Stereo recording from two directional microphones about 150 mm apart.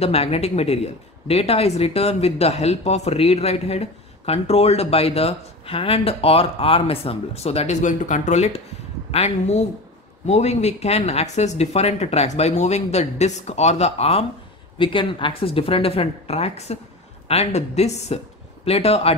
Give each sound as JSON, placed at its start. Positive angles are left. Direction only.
{"t": 0.0, "sound": "a woman's voice", "side_deg": 40}